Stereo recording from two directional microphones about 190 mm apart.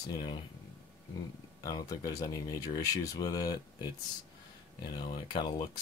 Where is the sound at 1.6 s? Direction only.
20° left (ahead or behind).